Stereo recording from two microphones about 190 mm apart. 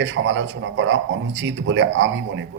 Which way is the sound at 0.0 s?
75° right (ahead or behind).